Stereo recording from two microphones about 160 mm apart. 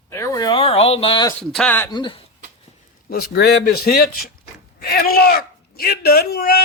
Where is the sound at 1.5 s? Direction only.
10° left (ahead or behind).